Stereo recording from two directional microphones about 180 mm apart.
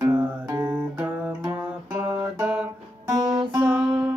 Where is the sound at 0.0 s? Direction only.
10° right (ahead or behind).